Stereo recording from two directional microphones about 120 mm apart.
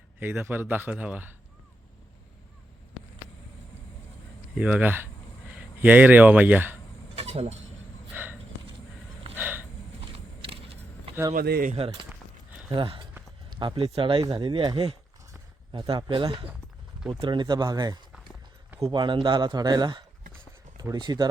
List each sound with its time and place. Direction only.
0.2 s a man's voice: 15° right (ahead or behind)
4.5 s a man's voice: 10° right (ahead or behind)
7.2 s vehicle: 55° right (ahead or behind)
8.1 s a sound: 15° right (ahead or behind)
10.0 s vehicle: 50° right (ahead or behind)
11.7 s a man's voice: 50° right (ahead or behind); by 21.2 s 35° right (ahead or behind)